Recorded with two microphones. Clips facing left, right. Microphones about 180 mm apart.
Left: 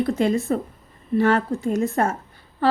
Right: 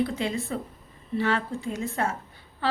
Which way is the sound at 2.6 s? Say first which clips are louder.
Left 8 dB; 45° left (ahead or behind).